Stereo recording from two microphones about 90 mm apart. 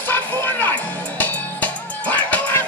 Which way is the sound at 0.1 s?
25° left (ahead or behind).